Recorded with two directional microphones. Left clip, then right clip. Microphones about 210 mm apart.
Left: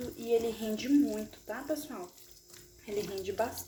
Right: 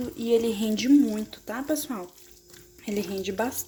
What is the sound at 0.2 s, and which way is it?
Speech, 50° right (ahead or behind).